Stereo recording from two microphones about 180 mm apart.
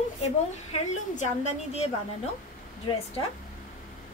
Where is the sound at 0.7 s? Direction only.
40° left (ahead or behind).